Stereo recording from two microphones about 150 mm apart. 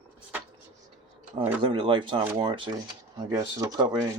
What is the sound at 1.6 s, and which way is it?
Speech, 35° right (ahead or behind).